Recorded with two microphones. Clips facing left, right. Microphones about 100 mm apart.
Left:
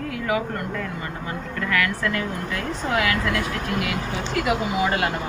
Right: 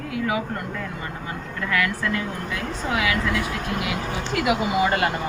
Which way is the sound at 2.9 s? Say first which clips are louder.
Left 1 dB; 10° right (ahead or behind).